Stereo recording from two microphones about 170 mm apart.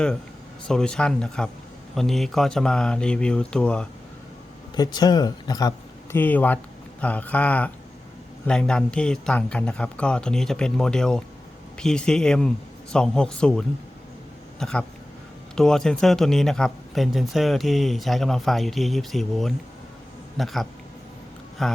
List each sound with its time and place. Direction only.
0.7 s a man's voice: 5° left (ahead or behind)
4.7 s a man's voice: 25° left (ahead or behind); by 21.8 s centre (ahead or behind)